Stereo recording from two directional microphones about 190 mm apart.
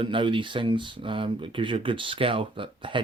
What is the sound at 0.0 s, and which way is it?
Speech, 25° right (ahead or behind).